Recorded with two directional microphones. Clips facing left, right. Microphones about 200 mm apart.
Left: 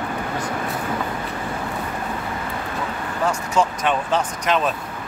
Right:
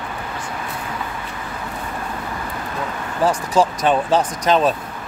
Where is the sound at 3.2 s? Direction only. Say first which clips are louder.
Right 4 dB; 35° right (ahead or behind).